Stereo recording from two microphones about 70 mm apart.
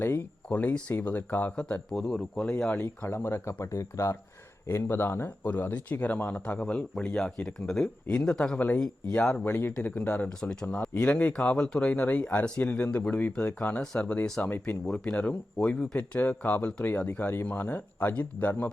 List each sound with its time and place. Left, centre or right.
0.4 s speech: centre
1.9 s speech: centre
2.8 s speech: left
4.7 s speech: left; by 9.3 s centre
9.3 s speech: left
10.2 s speech: centre